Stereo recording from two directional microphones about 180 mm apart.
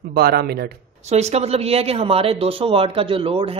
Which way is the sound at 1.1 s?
35° right (ahead or behind).